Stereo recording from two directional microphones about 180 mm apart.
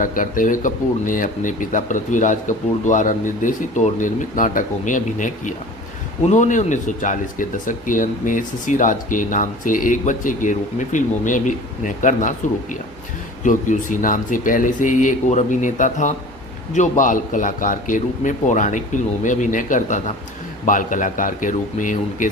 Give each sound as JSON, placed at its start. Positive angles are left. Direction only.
{"t": 0.0, "sound": "speech", "side_deg": 50}
{"t": 13.4, "sound": "speech", "side_deg": 45}